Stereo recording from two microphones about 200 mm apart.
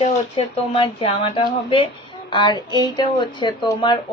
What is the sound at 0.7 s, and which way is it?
Speech, 30° left (ahead or behind).